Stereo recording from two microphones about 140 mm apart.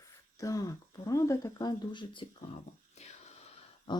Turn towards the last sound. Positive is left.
turn(degrees=35)  # may be behind; listen again after turning